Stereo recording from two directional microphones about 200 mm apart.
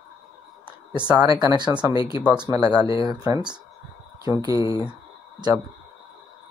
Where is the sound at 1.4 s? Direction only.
20° right (ahead or behind).